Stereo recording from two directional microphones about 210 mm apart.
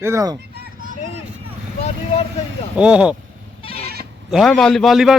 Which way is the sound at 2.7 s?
5° right (ahead or behind).